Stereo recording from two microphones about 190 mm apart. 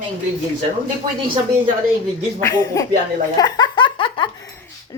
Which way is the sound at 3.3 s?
20° left (ahead or behind).